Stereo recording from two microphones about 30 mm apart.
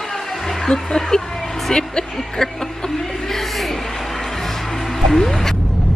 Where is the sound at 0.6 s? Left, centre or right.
Centre.